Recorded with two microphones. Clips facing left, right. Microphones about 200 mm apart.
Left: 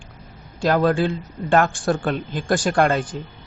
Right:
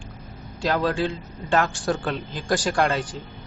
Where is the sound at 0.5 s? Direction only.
50° left (ahead or behind).